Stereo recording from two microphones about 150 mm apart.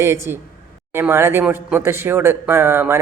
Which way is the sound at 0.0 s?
20° right (ahead or behind).